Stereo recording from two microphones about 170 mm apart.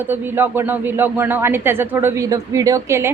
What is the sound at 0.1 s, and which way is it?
Speech, 10° right (ahead or behind).